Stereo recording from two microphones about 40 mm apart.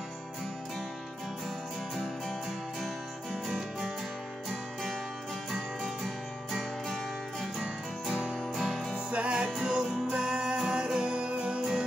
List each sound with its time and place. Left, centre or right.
2.8 s music: centre
5.5 s music: centre
9.1 s music: right
9.6 s music: centre